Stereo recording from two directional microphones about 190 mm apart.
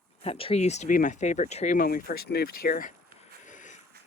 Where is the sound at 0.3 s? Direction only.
30° left (ahead or behind).